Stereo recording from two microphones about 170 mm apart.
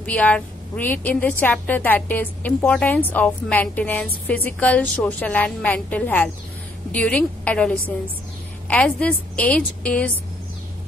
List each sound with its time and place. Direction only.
0.0 s a woman's voice: 10° left (ahead or behind)